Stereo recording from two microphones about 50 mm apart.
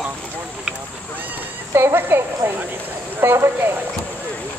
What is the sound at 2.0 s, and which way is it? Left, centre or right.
A woman's voice, right.